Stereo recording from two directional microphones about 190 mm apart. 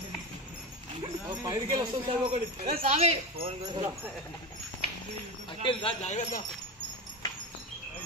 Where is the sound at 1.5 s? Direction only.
20° right (ahead or behind).